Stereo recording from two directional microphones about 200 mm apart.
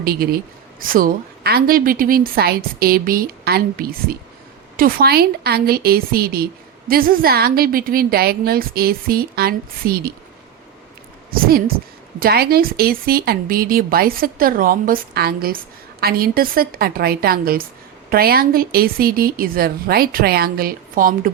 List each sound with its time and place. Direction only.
0.0 s a woman's voice: 50° right (ahead or behind)
11.3 s a woman's voice: 50° right (ahead or behind)